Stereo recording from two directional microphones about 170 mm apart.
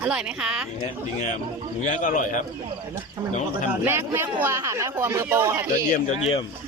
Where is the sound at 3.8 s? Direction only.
15° right (ahead or behind).